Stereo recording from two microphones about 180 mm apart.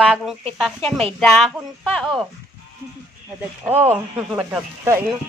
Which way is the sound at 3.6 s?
10° right (ahead or behind).